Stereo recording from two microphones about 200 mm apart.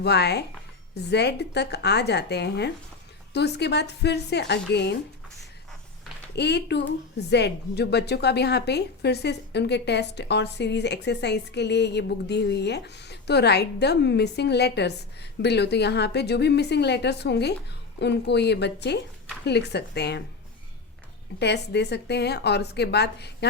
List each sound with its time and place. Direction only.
0.0 s a woman's voice: 55° left (ahead or behind)
6.3 s a woman's voice: 55° left (ahead or behind)
21.3 s a woman's voice: 55° left (ahead or behind)